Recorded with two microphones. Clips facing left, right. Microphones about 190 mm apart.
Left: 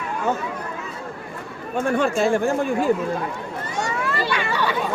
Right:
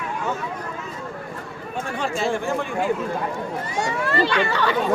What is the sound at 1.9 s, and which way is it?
Speech, 50° left (ahead or behind).